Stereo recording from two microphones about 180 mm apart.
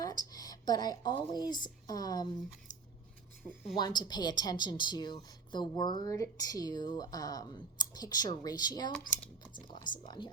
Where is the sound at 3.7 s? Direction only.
25° left (ahead or behind).